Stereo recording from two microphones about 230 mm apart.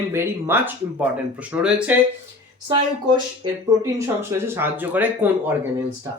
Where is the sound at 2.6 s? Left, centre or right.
Centre.